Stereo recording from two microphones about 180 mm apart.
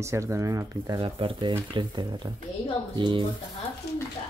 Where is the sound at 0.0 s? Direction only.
15° right (ahead or behind).